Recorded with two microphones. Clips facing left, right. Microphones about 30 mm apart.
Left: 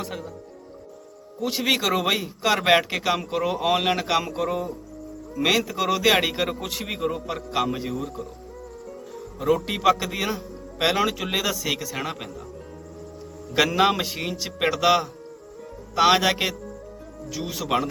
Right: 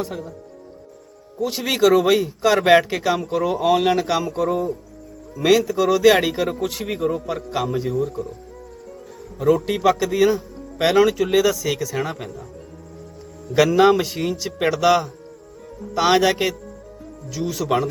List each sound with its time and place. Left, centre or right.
1.4 s speech: centre
9.5 s speech: centre
11.2 s speech: left
14.0 s speech: centre